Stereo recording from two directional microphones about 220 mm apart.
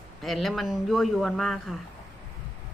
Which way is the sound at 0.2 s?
Centre (ahead or behind).